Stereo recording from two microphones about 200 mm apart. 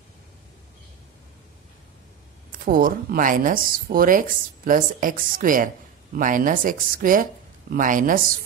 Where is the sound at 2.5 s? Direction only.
45° right (ahead or behind).